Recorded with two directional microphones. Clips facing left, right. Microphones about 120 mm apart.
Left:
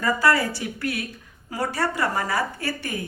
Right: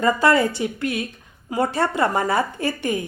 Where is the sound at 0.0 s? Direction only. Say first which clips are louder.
Right 4 dB; 20° right (ahead or behind).